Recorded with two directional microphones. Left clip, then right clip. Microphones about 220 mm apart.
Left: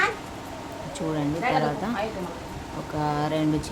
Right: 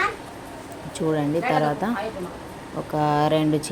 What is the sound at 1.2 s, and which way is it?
Speech, 10° right (ahead or behind).